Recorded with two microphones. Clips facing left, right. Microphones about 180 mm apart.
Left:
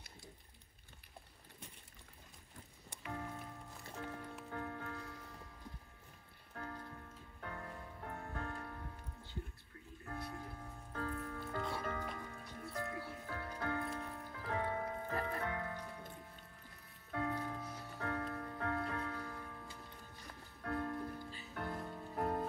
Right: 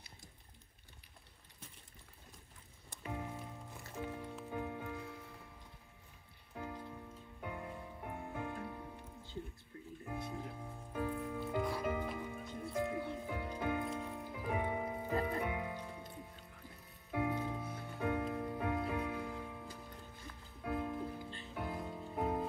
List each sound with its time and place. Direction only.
3.1 s music: 15° right (ahead or behind)
6.5 s music: 10° right (ahead or behind)
10.0 s music: 15° right (ahead or behind)
17.1 s music: 15° right (ahead or behind)